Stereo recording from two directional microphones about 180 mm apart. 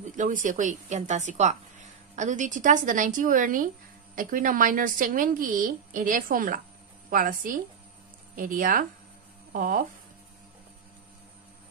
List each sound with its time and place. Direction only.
0.1 s a woman's voice: 45° right (ahead or behind)